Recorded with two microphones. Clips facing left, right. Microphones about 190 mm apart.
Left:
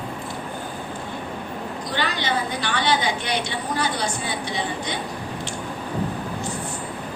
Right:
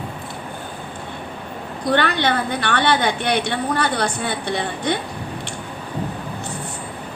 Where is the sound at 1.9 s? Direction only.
60° right (ahead or behind).